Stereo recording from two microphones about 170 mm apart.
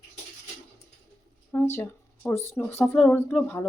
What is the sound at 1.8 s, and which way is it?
Speech, 15° left (ahead or behind).